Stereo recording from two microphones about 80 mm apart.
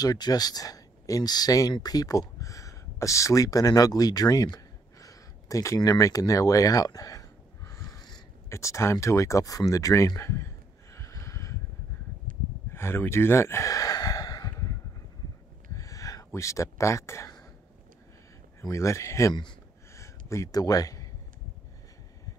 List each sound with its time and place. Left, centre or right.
0.0 s speech: left
5.8 s a sound: left
8.5 s speech: left
12.7 s sigh: left
15.7 s a sound: left
16.3 s speech: left
18.6 s speech: left
20.0 s a sound: left
20.6 s a man's voice: left